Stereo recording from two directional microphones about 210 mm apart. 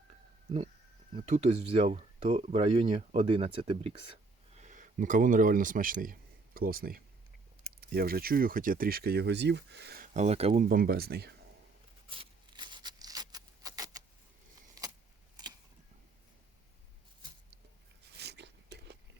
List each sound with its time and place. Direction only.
1.1 s speech: 35° right (ahead or behind); by 10.1 s 50° right (ahead or behind)
10.2 s speech: 30° right (ahead or behind)
10.7 s speech: 45° right (ahead or behind)
12.0 s a sound: 25° right (ahead or behind)
18.2 s biting: 55° right (ahead or behind)